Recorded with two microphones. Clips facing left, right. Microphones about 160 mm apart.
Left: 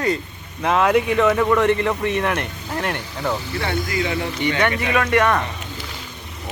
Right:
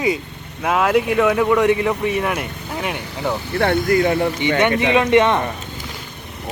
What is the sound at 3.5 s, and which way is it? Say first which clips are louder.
Speech: right 7 dB; 55° right (ahead or behind).